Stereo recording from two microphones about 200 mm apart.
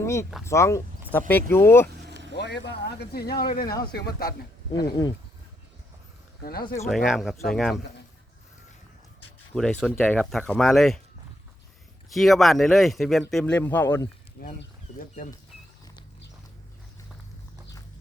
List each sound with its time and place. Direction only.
0.0 s speech: 15° left (ahead or behind)
2.0 s vehicle: 60° right (ahead or behind)
2.3 s speech: 55° left (ahead or behind)
4.7 s speech: 20° left (ahead or behind)
6.4 s speech: 50° left (ahead or behind)
6.8 s speech: centre (ahead or behind)
9.6 s speech: 5° left (ahead or behind)
12.1 s speech: centre (ahead or behind)
14.4 s speech: 50° left (ahead or behind)